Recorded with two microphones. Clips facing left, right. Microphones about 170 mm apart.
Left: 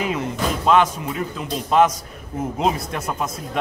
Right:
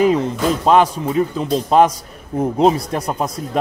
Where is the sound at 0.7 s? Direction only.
35° right (ahead or behind).